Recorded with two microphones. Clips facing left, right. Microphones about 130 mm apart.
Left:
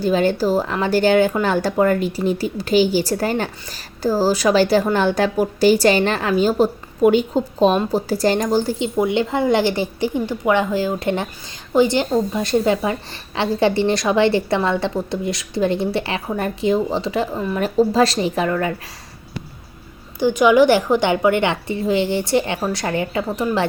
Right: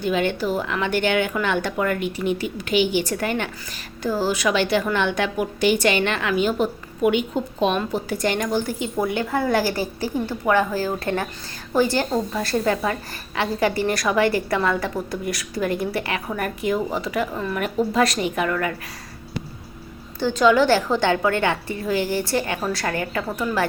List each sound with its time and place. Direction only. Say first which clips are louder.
0.0 s a woman's voice: left 5 dB; 35° left (ahead or behind)
20.1 s a woman's voice: left 4 dB; 15° left (ahead or behind)